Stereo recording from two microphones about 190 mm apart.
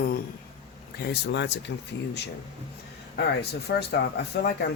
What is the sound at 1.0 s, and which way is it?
Speech, 65° left (ahead or behind).